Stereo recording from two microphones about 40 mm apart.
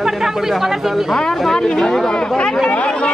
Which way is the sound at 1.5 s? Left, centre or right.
Centre.